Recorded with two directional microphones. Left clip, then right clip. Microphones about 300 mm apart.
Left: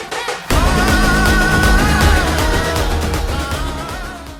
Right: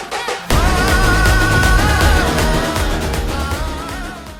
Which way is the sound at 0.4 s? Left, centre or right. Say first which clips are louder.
Left 1 dB; centre.